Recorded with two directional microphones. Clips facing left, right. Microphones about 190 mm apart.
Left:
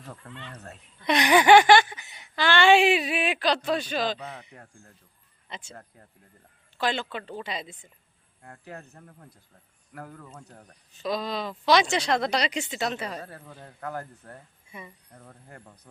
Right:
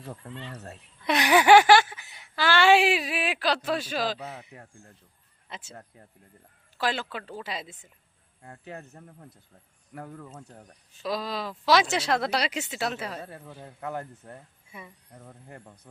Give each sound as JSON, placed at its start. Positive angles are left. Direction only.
{"t": 0.3, "sound": "speech", "side_deg": -30}
{"t": 1.0, "sound": "a woman's voice", "side_deg": -5}
{"t": 8.4, "sound": "speech", "side_deg": -20}
{"t": 10.2, "sound": "speech", "side_deg": -5}
{"t": 13.8, "sound": "speech", "side_deg": -20}
{"t": 14.7, "sound": "speech", "side_deg": -5}